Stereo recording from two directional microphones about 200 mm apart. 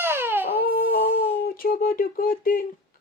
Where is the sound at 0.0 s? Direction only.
10° right (ahead or behind).